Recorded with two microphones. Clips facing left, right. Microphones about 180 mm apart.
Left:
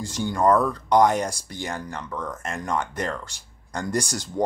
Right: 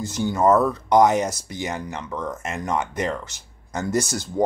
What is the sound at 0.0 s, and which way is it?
Speech, 5° right (ahead or behind).